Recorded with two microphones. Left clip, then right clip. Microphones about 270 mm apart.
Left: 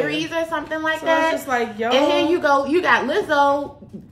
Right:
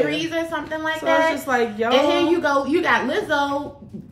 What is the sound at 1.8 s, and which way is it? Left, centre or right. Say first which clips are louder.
A woman's voice: left 1 dB; centre.